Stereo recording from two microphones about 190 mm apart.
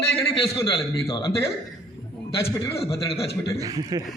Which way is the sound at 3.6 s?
20° right (ahead or behind).